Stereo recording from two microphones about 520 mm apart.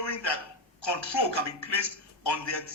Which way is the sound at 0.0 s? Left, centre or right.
Left.